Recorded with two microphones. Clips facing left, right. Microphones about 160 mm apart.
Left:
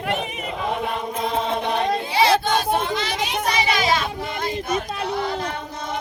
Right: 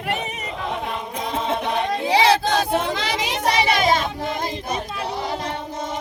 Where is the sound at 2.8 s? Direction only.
90° right.